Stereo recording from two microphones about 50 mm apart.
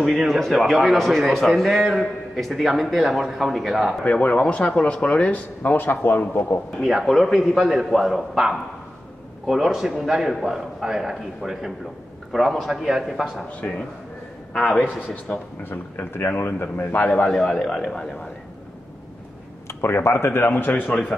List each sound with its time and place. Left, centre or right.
0.3 s a man's voice: centre
4.0 s speech: left
5.6 s a man's voice: left
6.8 s a man's voice: centre
13.6 s speech: left
14.5 s speech: centre
15.3 s speech: left
15.7 s a man's voice: left
17.3 s speech: centre
19.7 s a man's voice: left